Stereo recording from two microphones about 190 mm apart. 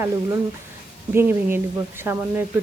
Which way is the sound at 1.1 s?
10° right (ahead or behind).